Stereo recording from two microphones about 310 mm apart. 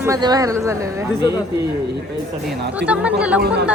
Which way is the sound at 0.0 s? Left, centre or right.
Centre.